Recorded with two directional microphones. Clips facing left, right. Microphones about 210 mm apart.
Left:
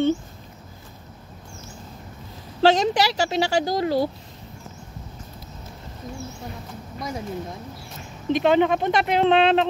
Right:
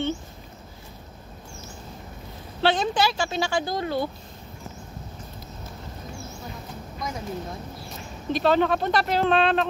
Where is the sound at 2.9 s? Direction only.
35° left (ahead or behind).